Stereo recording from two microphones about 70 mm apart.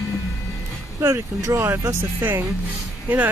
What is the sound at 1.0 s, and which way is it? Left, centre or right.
Speech, right.